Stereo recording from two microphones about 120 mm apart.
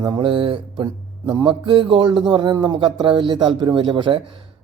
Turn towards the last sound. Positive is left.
turn(degrees=-45)  # may be behind; listen again after turning